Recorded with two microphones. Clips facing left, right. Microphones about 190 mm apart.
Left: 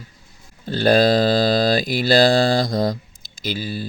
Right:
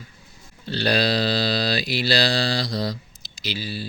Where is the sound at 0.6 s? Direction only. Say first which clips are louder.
Left 7 dB; 50° left (ahead or behind).